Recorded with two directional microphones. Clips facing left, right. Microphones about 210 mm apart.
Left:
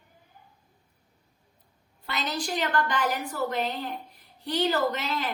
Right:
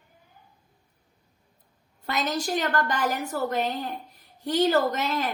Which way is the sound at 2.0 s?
45° right (ahead or behind).